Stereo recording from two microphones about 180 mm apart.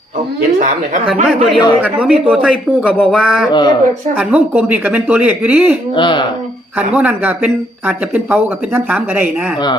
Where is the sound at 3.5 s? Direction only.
25° left (ahead or behind).